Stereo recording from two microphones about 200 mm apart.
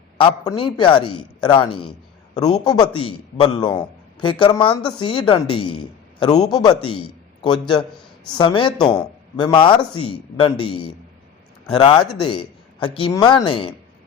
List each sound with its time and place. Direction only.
0.2 s a woman's voice: 25° left (ahead or behind)
8.4 s a woman's voice: 25° left (ahead or behind)